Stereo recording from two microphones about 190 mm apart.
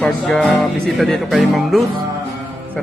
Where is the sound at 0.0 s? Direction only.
5° left (ahead or behind).